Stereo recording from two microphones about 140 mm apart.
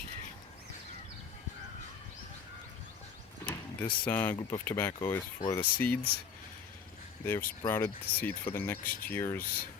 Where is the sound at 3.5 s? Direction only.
10° left (ahead or behind).